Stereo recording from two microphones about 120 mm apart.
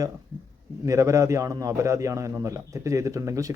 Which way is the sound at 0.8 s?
25° right (ahead or behind).